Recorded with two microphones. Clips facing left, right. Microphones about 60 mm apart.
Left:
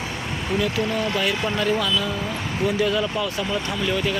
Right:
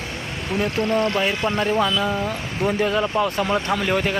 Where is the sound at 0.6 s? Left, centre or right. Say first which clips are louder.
Right 4 dB; right.